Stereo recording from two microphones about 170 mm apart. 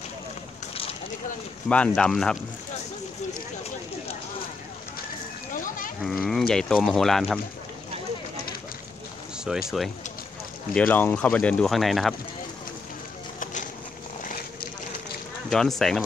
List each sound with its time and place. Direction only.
1.7 s speech: 5° left (ahead or behind)
5.5 s livestock: 50° left (ahead or behind)
6.0 s speech: centre (ahead or behind)
9.4 s speech: 5° right (ahead or behind)
10.7 s speech: 5° left (ahead or behind)
13.4 s horse: 50° left (ahead or behind)
15.5 s speech: centre (ahead or behind)